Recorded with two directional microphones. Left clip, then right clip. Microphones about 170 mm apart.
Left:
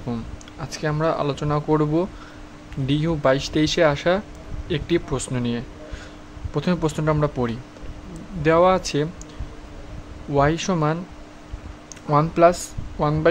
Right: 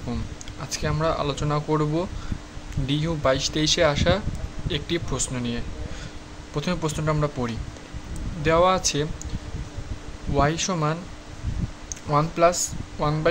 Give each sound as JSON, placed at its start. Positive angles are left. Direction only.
{"t": 0.1, "sound": "speech", "side_deg": 25}
{"t": 10.3, "sound": "speech", "side_deg": 30}